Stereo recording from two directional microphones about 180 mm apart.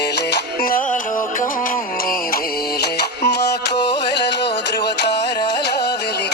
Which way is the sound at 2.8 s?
65° left (ahead or behind).